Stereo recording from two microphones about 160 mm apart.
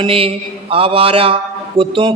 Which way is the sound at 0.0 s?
35° right (ahead or behind).